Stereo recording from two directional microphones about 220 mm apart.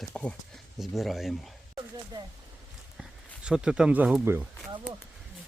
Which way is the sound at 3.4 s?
5° right (ahead or behind).